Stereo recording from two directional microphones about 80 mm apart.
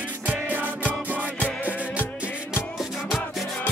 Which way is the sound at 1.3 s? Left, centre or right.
Centre.